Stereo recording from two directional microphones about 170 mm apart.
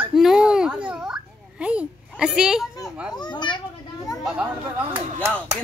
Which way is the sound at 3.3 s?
25° left (ahead or behind).